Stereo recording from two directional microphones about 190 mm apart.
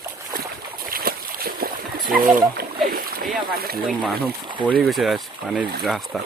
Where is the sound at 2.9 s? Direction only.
50° right (ahead or behind).